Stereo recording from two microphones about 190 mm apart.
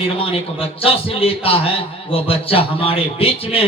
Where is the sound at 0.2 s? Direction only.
30° left (ahead or behind).